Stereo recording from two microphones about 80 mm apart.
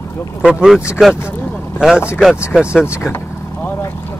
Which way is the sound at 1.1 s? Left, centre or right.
Left.